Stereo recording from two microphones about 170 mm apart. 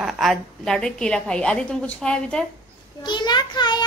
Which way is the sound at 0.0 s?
Centre (ahead or behind).